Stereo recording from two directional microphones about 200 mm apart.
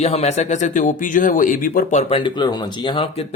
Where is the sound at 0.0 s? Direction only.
35° left (ahead or behind).